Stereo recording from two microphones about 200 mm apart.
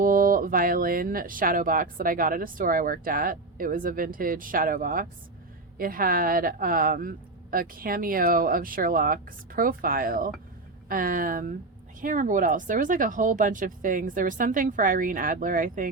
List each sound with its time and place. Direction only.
0.0 s speech: 45° right (ahead or behind)